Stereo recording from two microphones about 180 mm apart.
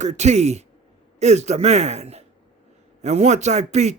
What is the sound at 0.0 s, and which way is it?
Speech, 40° right (ahead or behind).